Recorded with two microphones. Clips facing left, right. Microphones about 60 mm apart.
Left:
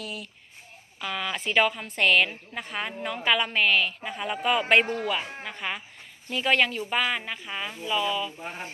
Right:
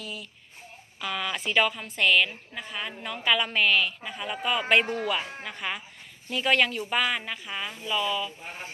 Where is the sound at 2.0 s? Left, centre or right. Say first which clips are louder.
Left 1 dB; left.